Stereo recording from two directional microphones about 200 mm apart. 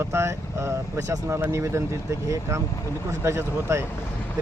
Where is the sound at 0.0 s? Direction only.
15° right (ahead or behind).